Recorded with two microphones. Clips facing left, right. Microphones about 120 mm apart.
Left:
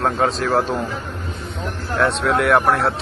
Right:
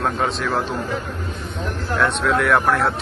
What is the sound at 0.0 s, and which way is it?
Speech, 35° left (ahead or behind).